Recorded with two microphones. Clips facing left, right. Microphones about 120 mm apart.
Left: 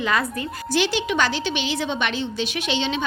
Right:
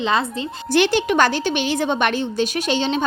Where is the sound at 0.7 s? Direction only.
55° right (ahead or behind).